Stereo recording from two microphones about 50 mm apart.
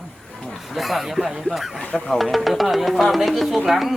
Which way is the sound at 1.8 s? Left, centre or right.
Centre.